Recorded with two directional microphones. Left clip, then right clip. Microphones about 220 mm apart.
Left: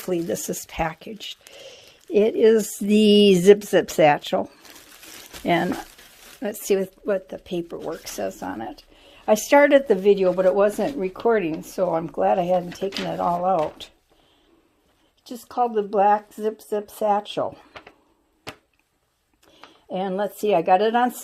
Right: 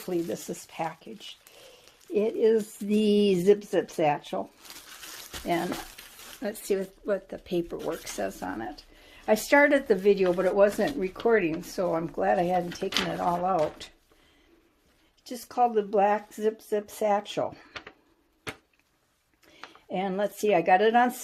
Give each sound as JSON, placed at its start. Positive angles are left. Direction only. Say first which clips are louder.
{"t": 0.0, "sound": "speech", "louder": "left 6 dB", "side_deg": 35}
{"t": 6.4, "sound": "speech", "louder": "left 7 dB", "side_deg": 35}
{"t": 7.3, "sound": "speech", "louder": "left 1 dB", "side_deg": 15}
{"t": 15.2, "sound": "speech", "louder": "left 2 dB", "side_deg": 20}
{"t": 19.9, "sound": "speech", "louder": "left 4 dB", "side_deg": 25}